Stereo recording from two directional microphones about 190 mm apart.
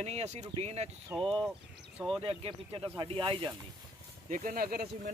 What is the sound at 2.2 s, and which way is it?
Speech, 30° right (ahead or behind).